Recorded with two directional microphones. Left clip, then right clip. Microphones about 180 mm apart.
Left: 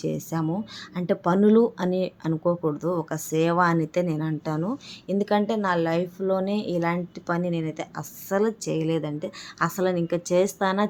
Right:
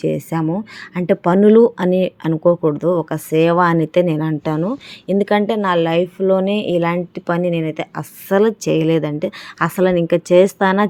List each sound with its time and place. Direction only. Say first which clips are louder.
0.0 s speech: right 9 dB; 25° right (ahead or behind)